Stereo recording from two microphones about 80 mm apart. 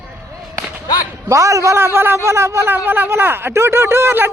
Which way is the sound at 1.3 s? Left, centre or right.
Right.